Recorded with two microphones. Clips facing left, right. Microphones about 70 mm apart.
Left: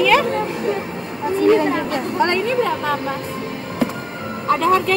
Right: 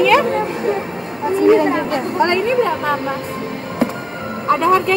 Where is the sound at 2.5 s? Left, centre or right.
Centre.